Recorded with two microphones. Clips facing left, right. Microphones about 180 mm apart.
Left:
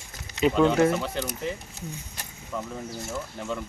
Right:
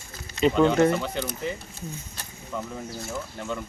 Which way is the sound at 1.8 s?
15° left (ahead or behind).